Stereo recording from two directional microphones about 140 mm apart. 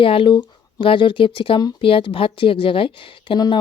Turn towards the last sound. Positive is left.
turn(degrees=35)  # may be behind; listen again after turning